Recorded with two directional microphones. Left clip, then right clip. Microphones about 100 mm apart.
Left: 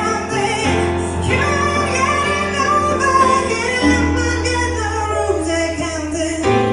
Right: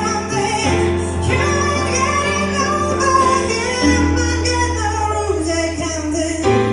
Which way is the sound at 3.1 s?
20° right (ahead or behind).